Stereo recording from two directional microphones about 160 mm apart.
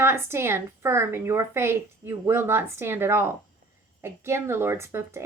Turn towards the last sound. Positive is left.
turn(degrees=-15)  # may be behind; listen again after turning